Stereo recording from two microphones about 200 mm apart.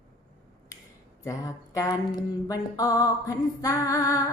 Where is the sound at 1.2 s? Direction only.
15° left (ahead or behind).